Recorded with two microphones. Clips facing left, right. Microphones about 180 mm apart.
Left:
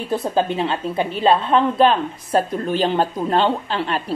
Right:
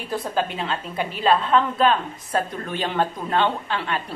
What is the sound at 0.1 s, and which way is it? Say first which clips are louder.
A woman's voice: left 5 dB; 25° left (ahead or behind).